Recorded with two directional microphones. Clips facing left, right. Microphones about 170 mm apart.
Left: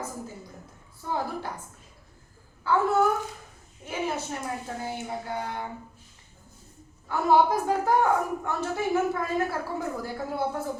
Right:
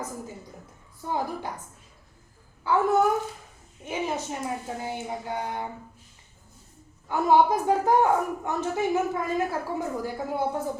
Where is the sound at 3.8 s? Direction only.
20° right (ahead or behind).